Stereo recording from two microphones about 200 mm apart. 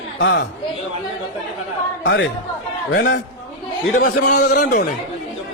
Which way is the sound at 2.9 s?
55° left (ahead or behind).